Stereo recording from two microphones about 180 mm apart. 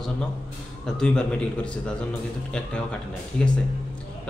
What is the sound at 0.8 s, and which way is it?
Speech, 5° left (ahead or behind).